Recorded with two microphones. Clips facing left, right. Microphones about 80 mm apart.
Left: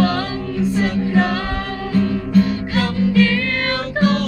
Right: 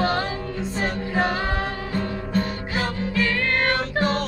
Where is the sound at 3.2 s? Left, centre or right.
Centre.